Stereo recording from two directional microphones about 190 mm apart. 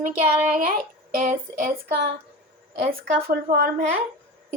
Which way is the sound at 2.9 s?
50° right (ahead or behind).